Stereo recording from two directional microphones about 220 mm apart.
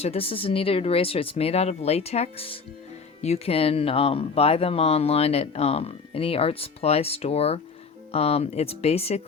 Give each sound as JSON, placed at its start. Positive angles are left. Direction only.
{"t": 0.0, "sound": "speech", "side_deg": 25}